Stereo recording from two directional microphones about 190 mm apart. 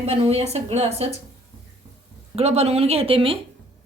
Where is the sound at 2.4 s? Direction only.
35° right (ahead or behind).